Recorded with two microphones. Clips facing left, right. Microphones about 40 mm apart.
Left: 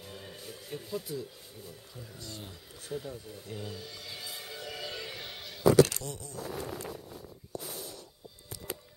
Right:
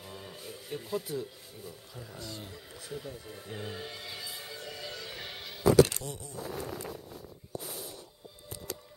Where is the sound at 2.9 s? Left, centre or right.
Centre.